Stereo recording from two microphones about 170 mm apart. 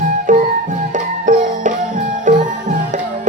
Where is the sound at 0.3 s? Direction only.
50° right (ahead or behind).